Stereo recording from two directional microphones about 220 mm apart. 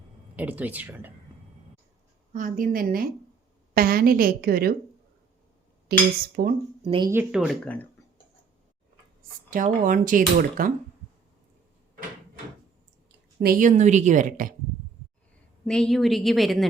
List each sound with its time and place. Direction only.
0.3 s speech: 5° right (ahead or behind)
2.3 s a woman's voice: 35° right (ahead or behind)
5.9 s a woman's voice: 45° right (ahead or behind)
6.8 s speech: 25° right (ahead or behind)
7.1 s a woman's voice: 5° right (ahead or behind)
9.8 s speech: 35° right (ahead or behind)
13.1 s speech: 45° right (ahead or behind)
15.6 s a woman's voice: 5° left (ahead or behind)